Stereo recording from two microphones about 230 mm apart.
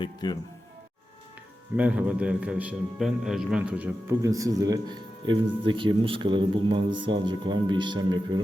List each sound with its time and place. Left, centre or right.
0.0 s speech: centre
1.7 s a man's voice: centre